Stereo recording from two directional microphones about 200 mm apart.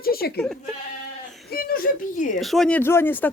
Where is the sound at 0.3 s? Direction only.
Centre (ahead or behind).